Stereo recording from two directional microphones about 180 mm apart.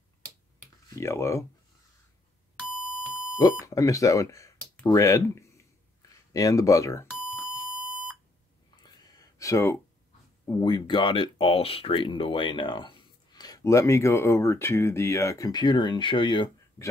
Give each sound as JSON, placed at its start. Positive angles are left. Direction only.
{"t": 0.8, "sound": "speech", "side_deg": 15}
{"t": 2.7, "sound": "beep", "side_deg": -5}
{"t": 3.6, "sound": "speech", "side_deg": 20}
{"t": 7.8, "sound": "beep", "side_deg": -5}
{"t": 8.8, "sound": "a sound", "side_deg": 20}
{"t": 10.4, "sound": "speech", "side_deg": 25}